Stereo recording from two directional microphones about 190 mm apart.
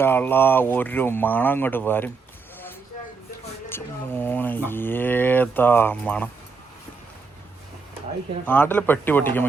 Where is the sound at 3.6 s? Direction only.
10° left (ahead or behind).